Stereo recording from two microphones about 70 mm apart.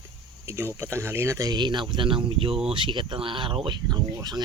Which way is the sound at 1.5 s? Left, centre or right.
Right.